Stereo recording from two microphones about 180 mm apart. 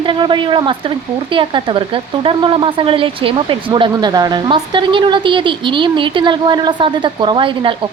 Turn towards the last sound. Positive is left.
turn(degrees=-30)  # may be behind; listen again after turning